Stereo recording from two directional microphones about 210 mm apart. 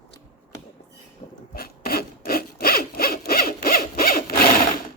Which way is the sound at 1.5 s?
45° left (ahead or behind).